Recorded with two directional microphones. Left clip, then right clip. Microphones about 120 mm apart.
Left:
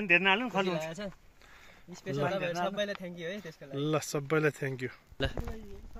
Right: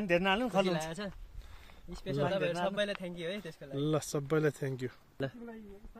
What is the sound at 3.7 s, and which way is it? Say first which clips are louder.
Speech: left 2 dB; 5° right (ahead or behind).